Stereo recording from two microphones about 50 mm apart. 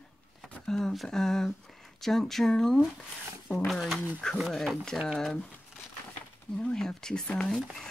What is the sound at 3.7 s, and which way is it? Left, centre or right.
Speech, centre.